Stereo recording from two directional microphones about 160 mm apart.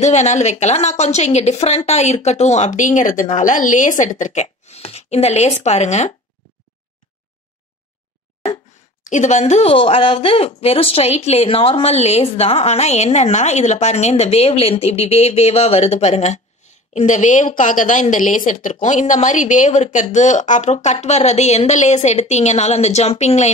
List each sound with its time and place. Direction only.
0.0 s a woman's voice: 45° left (ahead or behind)
9.0 s a woman's voice: 50° left (ahead or behind)